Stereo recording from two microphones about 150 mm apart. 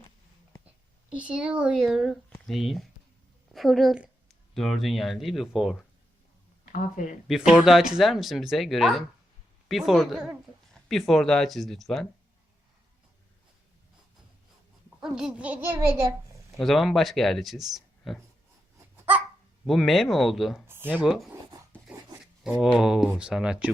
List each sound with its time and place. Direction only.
1.1 s a woman's voice: 5° right (ahead or behind)
6.7 s speech: 60° left (ahead or behind)
7.3 s speech: centre (ahead or behind)
15.0 s a child's voice: 5° right (ahead or behind); by 16.6 s 20° right (ahead or behind)
16.6 s speech: centre (ahead or behind)
19.6 s speech: centre (ahead or behind)
20.7 s speech: 15° right (ahead or behind)